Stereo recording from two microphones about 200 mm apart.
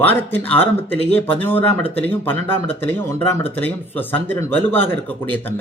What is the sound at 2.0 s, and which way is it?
A man's voice, 10° left (ahead or behind).